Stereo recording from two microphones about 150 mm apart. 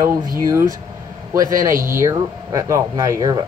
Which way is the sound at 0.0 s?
20° right (ahead or behind).